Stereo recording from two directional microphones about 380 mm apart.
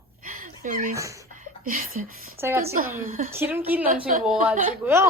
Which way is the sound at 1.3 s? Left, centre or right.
Right.